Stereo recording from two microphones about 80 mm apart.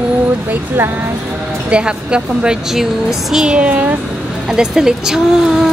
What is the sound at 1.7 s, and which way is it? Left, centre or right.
Speech, centre.